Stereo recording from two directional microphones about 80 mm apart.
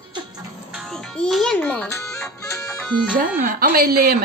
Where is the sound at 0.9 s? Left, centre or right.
Centre.